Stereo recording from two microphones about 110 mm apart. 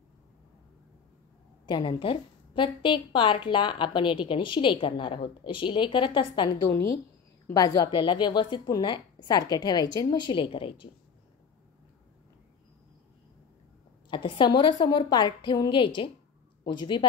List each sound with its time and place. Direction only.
1.7 s a woman's voice: 50° left (ahead or behind)
6.7 s a woman's voice: 30° left (ahead or behind); by 10.9 s 55° left (ahead or behind)
14.1 s a woman's voice: 45° left (ahead or behind)